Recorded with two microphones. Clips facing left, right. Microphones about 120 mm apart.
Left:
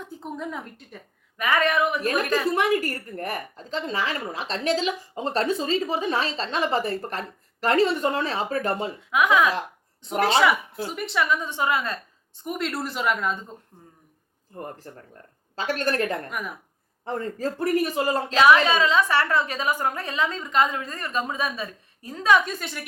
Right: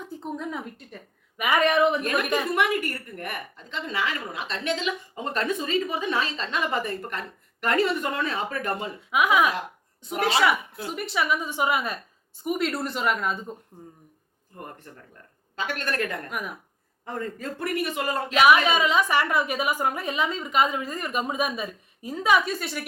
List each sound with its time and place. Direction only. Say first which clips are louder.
0.0 s a woman's voice: right 1 dB; centre (ahead or behind)
1.4 s speech: right 1 dB; 15° right (ahead or behind)
2.0 s a woman's voice: left 1 dB; 35° left (ahead or behind)
9.0 s a woman's voice: left 1 dB; 10° right (ahead or behind)
15.5 s a woman's voice: left 4 dB; 35° left (ahead or behind)
16.3 s speech: even; centre (ahead or behind)
17.1 s a woman's voice: left 4 dB; 30° left (ahead or behind)
18.3 s a woman's voice: left 1 dB; 15° right (ahead or behind)